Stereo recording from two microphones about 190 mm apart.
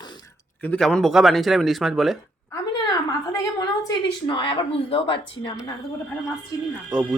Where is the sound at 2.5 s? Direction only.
20° left (ahead or behind).